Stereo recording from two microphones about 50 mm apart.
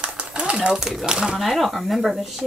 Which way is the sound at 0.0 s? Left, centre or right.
Right.